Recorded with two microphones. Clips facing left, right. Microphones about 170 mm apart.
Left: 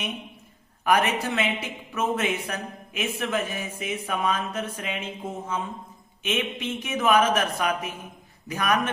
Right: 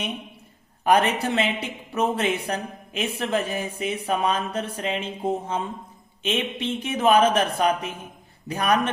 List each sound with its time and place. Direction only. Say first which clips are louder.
0.9 s speech: right 3 dB; 30° right (ahead or behind)